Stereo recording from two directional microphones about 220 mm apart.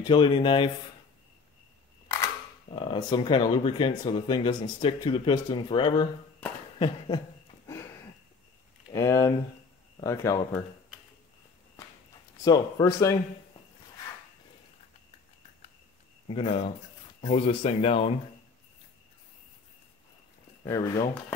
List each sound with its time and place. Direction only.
0.0 s speech: 20° left (ahead or behind)
2.7 s speech: 20° left (ahead or behind)
7.6 s sniff: 10° left (ahead or behind)
8.9 s speech: 15° left (ahead or behind)
12.4 s speech: 15° left (ahead or behind)
16.3 s speech: 25° left (ahead or behind)
20.6 s speech: 15° left (ahead or behind)